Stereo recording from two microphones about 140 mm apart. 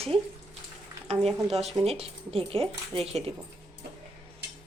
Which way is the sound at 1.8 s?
45° right (ahead or behind).